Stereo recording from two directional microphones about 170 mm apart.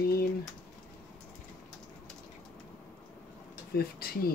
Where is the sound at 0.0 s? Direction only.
65° left (ahead or behind).